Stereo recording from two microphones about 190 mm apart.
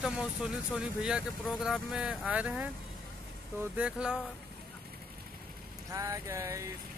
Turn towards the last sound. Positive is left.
turn(degrees=-15)  # may be behind; listen again after turning